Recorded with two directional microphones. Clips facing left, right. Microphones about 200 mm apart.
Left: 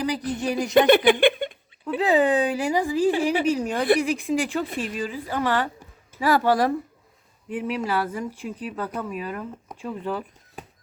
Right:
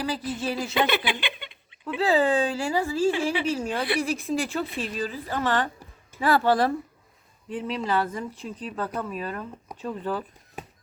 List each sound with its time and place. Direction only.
0.3 s speech: 15° left (ahead or behind)
0.8 s speech: 50° left (ahead or behind)
2.0 s speech: 20° left (ahead or behind)